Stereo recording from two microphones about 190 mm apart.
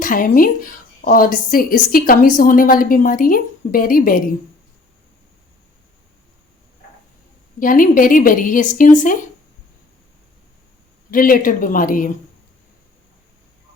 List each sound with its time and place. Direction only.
0.0 s speech: 45° left (ahead or behind)
7.6 s speech: 45° left (ahead or behind)
11.1 s speech: 45° left (ahead or behind)